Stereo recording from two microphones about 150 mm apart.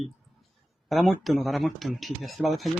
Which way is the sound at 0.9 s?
Centre (ahead or behind).